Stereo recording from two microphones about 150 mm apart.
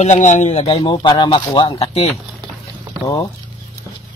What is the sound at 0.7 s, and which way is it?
Speech, 30° left (ahead or behind).